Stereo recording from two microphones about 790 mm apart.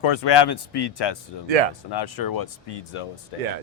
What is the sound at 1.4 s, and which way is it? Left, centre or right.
Speech, right.